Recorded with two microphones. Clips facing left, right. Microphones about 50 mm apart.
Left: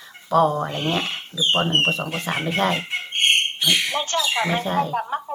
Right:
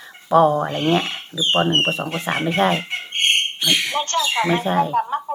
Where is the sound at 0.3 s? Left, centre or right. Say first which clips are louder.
Right 4 dB; centre.